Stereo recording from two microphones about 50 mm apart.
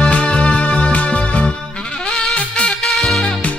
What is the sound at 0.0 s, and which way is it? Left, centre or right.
Music, left.